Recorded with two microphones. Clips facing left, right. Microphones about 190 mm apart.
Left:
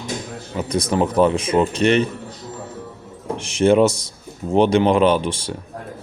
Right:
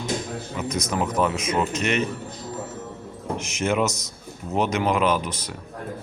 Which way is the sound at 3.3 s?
30° left (ahead or behind).